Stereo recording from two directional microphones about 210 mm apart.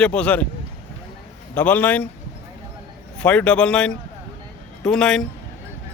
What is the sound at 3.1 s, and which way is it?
Speech, 5° left (ahead or behind).